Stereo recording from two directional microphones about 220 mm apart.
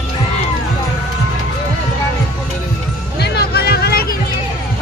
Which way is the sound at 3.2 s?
45° left (ahead or behind).